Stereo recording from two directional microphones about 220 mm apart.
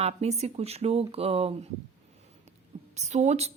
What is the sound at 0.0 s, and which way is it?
Speech, 30° right (ahead or behind).